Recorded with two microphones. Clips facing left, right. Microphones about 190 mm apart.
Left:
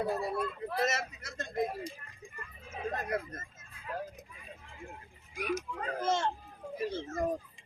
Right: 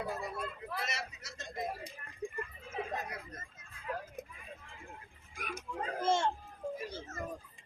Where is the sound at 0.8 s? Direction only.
45° left (ahead or behind).